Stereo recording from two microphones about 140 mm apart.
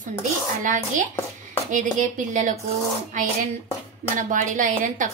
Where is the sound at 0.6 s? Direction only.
65° right (ahead or behind).